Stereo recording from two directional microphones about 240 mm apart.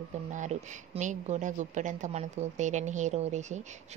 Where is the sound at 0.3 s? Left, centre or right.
Right.